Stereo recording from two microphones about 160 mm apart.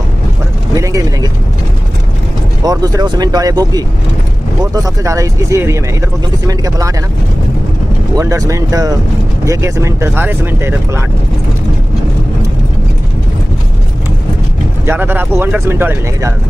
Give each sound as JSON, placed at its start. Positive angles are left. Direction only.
{"t": 0.7, "sound": "speech", "side_deg": -20}
{"t": 2.6, "sound": "speech", "side_deg": -25}
{"t": 8.2, "sound": "speech", "side_deg": -20}
{"t": 14.9, "sound": "speech", "side_deg": -10}